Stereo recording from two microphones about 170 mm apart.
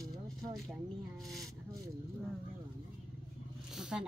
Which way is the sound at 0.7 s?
Centre (ahead or behind).